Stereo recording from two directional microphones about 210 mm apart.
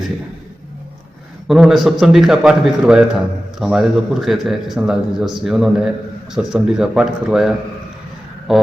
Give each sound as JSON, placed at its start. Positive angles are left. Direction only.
{"t": 1.5, "sound": "a man's voice", "side_deg": 0}